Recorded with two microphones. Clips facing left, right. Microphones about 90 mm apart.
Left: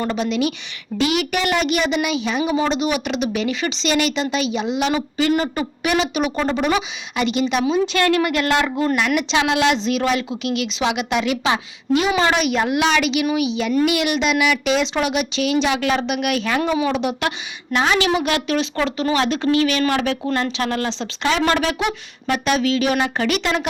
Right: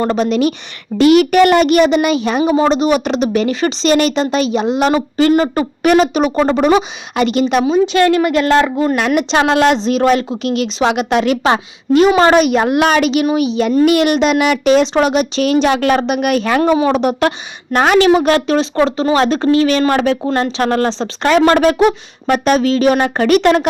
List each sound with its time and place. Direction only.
0.0 s speech: 40° right (ahead or behind)
7.6 s speech: 30° right (ahead or behind); by 23.6 s 50° right (ahead or behind)